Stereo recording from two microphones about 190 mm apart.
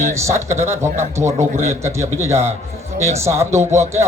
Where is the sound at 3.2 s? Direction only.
15° right (ahead or behind).